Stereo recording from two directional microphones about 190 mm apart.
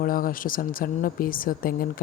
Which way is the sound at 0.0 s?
50° left (ahead or behind).